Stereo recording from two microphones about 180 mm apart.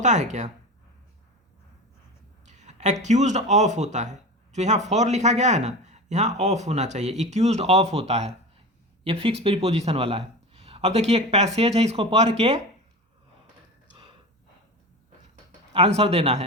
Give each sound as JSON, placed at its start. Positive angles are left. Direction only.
{"t": 0.0, "sound": "speech", "side_deg": -40}
{"t": 2.5, "sound": "speech", "side_deg": -40}
{"t": 15.7, "sound": "speech", "side_deg": -35}